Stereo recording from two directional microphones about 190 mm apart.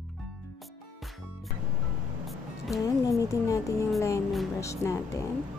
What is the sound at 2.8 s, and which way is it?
A woman's voice, 15° left (ahead or behind).